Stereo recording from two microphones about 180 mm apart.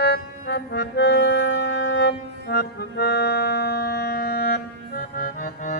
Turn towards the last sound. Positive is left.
turn(degrees=50)  # may be behind; listen again after turning